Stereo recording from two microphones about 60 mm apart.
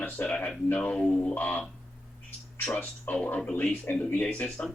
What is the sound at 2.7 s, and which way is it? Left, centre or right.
A man's voice, left.